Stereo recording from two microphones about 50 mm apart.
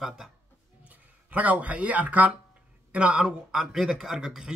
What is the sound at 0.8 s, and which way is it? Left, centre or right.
A man's voice, right.